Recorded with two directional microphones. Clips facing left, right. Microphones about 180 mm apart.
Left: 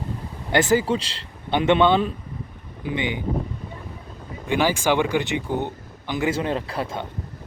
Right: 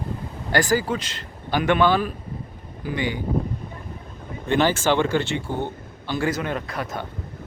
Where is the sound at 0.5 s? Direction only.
25° left (ahead or behind).